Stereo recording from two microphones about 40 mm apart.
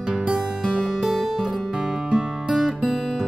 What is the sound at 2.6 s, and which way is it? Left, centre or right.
Music, centre.